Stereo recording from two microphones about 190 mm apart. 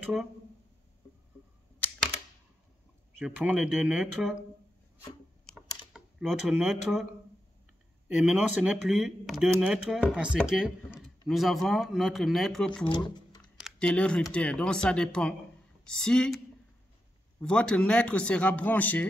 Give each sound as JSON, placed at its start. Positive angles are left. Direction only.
{"t": 0.0, "sound": "speech", "side_deg": 0}
{"t": 3.3, "sound": "speech", "side_deg": -5}
{"t": 5.9, "sound": "a sound", "side_deg": 0}
{"t": 6.7, "sound": "speech", "side_deg": 0}
{"t": 8.1, "sound": "speech", "side_deg": -5}
{"t": 12.8, "sound": "speech", "side_deg": 25}
{"t": 13.4, "sound": "speech", "side_deg": 0}
{"t": 17.4, "sound": "speech", "side_deg": 5}